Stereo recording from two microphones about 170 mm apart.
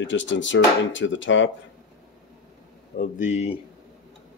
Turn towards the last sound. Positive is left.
turn(degrees=45)  # may be behind; listen again after turning